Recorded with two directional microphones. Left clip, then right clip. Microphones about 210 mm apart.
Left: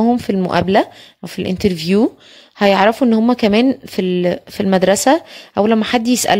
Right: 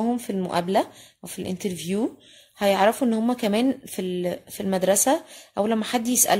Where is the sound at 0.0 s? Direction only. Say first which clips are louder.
Left 10 dB; 40° left (ahead or behind).